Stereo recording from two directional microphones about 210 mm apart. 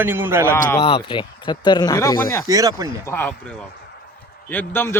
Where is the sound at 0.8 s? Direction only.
30° left (ahead or behind).